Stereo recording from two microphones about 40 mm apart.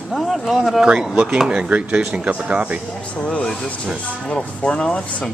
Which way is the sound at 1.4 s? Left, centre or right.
Right.